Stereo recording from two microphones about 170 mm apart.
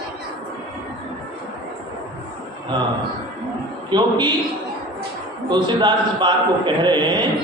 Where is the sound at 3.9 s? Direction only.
25° right (ahead or behind).